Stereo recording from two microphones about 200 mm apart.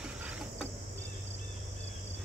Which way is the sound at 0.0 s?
5° right (ahead or behind).